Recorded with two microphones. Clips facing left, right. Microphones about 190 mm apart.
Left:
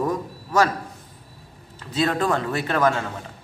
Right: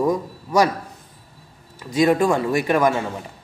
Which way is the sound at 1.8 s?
10° right (ahead or behind).